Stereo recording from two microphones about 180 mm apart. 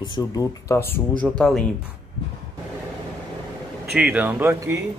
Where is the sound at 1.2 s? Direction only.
Centre (ahead or behind).